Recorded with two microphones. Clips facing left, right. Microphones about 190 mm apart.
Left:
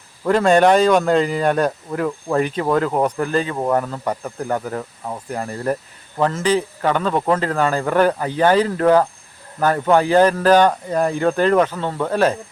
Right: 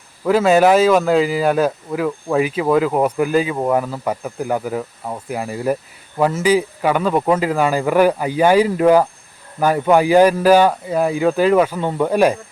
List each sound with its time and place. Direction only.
0.3 s speech: 5° right (ahead or behind)